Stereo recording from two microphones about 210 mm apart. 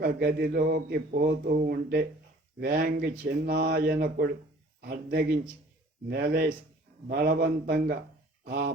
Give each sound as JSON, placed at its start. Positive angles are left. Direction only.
{"t": 0.0, "sound": "speech", "side_deg": -50}